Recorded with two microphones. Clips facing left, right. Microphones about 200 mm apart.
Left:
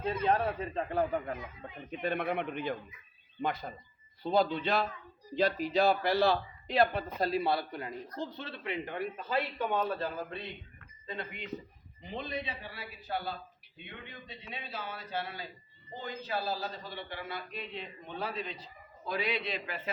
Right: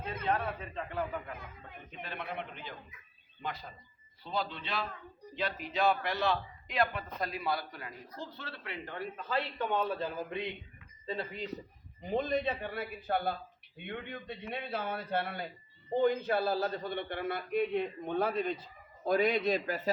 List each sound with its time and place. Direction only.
0.0 s speech: 30° left (ahead or behind)
2.0 s a man's voice: 55° left (ahead or behind); by 9.8 s 10° left (ahead or behind)
10.0 s speech: 15° right (ahead or behind)
11.0 s speech: 30° right (ahead or behind)
12.0 s a man's voice: 45° right (ahead or behind)